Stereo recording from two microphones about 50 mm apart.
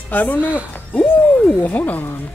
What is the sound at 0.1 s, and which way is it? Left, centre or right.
Speech, left.